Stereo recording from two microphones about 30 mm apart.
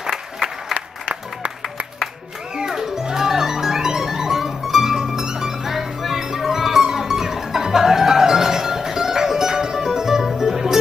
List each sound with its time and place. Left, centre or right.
0.1 s applause: centre
2.5 s music: centre